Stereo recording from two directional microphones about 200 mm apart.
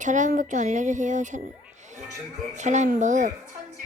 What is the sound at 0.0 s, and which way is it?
Speech, 40° right (ahead or behind).